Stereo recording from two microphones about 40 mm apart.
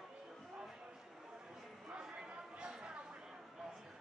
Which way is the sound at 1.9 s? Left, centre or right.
Right.